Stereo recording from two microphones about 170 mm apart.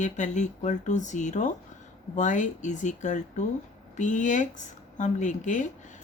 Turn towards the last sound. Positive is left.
turn(degrees=45)  # may be behind; listen again after turning